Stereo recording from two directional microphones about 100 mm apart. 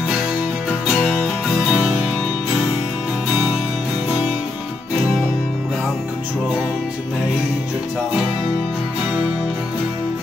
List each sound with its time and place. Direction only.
0.7 s music: 5° left (ahead or behind)